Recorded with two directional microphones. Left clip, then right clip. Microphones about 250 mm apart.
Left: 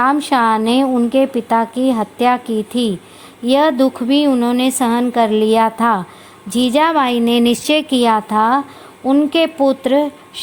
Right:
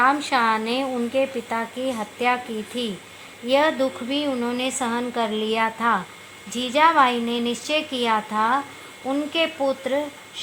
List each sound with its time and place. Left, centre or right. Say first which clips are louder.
0.0 s speech: left 5 dB; left